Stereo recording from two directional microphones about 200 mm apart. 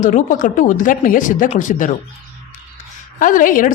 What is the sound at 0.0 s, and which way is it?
Speech, 40° left (ahead or behind).